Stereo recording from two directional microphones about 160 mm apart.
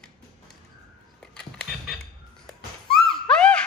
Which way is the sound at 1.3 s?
Centre (ahead or behind).